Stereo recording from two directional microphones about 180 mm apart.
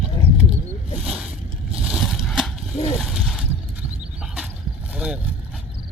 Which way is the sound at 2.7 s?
35° left (ahead or behind).